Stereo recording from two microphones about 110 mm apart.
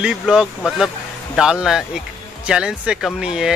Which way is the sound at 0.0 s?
5° right (ahead or behind).